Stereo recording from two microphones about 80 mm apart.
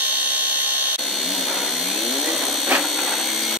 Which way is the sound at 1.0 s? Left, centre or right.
Centre.